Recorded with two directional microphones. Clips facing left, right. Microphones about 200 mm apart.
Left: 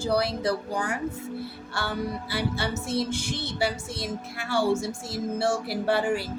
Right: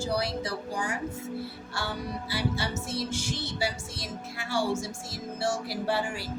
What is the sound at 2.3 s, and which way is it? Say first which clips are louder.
Music: even; 60° left (ahead or behind).